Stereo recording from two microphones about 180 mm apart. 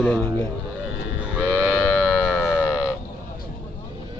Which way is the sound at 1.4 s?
5° right (ahead or behind).